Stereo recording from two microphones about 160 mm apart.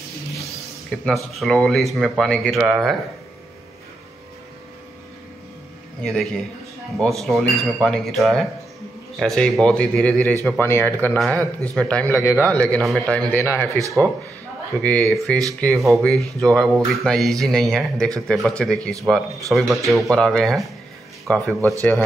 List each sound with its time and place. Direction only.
1.0 s speech: centre (ahead or behind)
6.0 s a man's voice: centre (ahead or behind)
13.4 s a man's voice: 15° left (ahead or behind)
13.7 s speech: 20° right (ahead or behind)
14.8 s a man's voice: 10° left (ahead or behind)